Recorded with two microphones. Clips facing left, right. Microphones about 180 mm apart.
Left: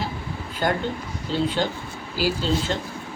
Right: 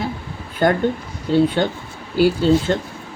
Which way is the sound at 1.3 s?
55° right (ahead or behind).